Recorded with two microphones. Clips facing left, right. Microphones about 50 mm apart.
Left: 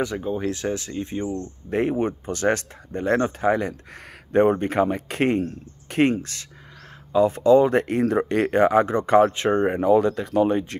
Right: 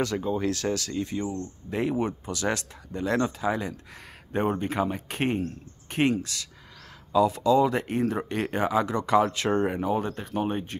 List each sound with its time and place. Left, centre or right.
0.0 s speech: centre
1.7 s speech: left
8.8 s speech: left
9.8 s speech: left